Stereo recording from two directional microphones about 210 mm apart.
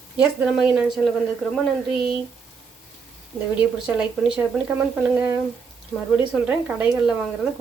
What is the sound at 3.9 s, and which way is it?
Speech, 5° right (ahead or behind).